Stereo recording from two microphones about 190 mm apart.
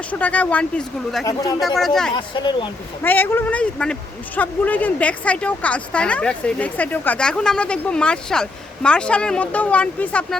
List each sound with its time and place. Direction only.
0.1 s speech: 10° left (ahead or behind)
1.2 s speech: 20° left (ahead or behind)
1.6 s speech: centre (ahead or behind)
2.1 s speech: 25° left (ahead or behind)
3.0 s speech: 10° left (ahead or behind)